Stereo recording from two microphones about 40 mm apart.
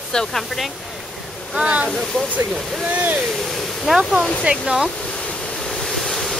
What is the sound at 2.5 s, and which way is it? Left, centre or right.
Speech, centre.